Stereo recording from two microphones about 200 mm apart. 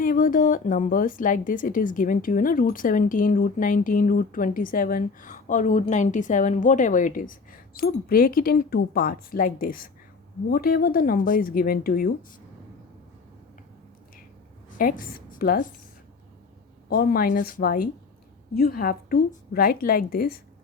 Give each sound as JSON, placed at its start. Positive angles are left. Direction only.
{"t": 0.0, "sound": "a woman's voice", "side_deg": 45}
{"t": 14.8, "sound": "a woman's voice", "side_deg": 45}
{"t": 16.9, "sound": "a woman's voice", "side_deg": 45}